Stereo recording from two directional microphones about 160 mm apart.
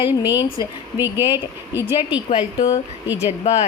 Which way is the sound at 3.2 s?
45° left (ahead or behind).